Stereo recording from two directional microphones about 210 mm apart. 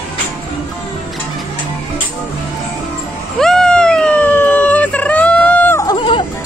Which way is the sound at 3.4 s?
5° left (ahead or behind).